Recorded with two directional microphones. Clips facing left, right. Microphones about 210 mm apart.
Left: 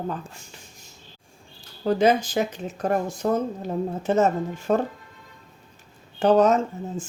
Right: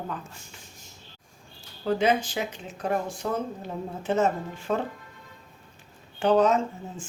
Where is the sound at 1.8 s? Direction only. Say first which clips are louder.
Left 4 dB; 40° left (ahead or behind).